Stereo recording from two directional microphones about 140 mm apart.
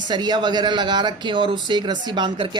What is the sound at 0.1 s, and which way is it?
Speech, 30° right (ahead or behind).